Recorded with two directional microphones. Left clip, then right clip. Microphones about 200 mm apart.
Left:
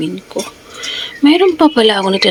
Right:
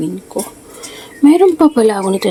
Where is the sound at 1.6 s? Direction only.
10° left (ahead or behind).